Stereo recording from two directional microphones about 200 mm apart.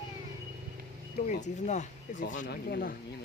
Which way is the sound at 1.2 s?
35° left (ahead or behind).